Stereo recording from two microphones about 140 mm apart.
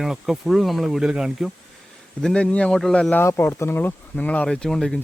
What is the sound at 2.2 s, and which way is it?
Speech, 5° left (ahead or behind).